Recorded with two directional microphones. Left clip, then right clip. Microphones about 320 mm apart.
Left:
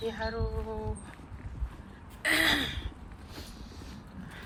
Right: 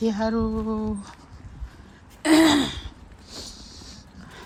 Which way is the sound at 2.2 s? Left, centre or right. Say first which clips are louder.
Right 8 dB; centre.